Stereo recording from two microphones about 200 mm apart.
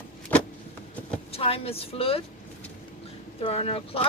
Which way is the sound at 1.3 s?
30° left (ahead or behind).